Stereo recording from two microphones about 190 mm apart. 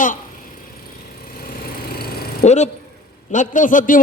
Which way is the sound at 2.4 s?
35° left (ahead or behind).